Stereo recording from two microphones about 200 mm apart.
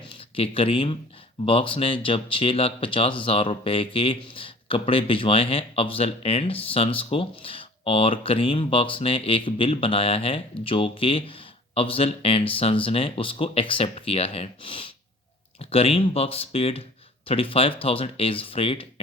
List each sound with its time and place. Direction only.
0.1 s speech: 25° left (ahead or behind)